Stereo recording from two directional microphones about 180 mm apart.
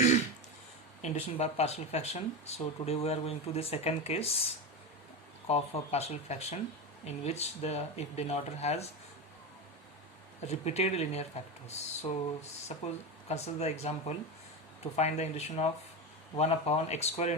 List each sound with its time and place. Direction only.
1.0 s speech: 35° left (ahead or behind)
5.5 s speech: 35° left (ahead or behind)
10.4 s speech: 40° left (ahead or behind)
14.9 s speech: 40° left (ahead or behind)